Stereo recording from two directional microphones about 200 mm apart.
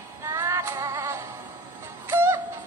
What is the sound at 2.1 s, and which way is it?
Music, 10° right (ahead or behind).